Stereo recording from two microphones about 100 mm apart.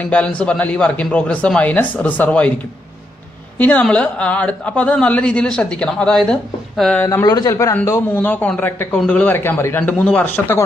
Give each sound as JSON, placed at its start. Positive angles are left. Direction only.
{"t": 0.0, "sound": "a man's voice", "side_deg": 10}
{"t": 3.5, "sound": "a woman's voice", "side_deg": 15}
{"t": 7.2, "sound": "a man's voice", "side_deg": 35}